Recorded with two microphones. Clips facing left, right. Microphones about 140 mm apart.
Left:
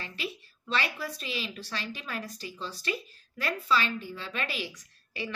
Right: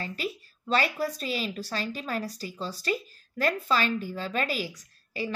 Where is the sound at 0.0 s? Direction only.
40° right (ahead or behind).